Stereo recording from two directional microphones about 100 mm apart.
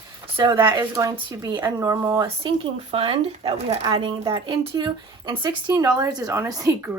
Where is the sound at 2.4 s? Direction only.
70° right (ahead or behind).